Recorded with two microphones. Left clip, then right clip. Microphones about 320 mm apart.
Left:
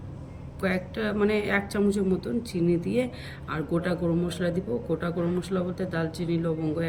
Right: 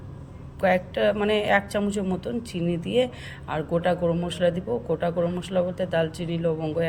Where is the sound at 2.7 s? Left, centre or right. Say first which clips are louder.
Right 7 dB; right.